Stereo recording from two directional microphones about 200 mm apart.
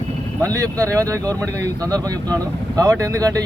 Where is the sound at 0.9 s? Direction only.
15° right (ahead or behind).